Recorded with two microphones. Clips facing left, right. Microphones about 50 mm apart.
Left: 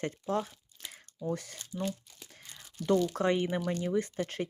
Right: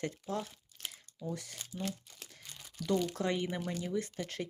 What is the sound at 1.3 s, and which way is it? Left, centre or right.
Speech, left.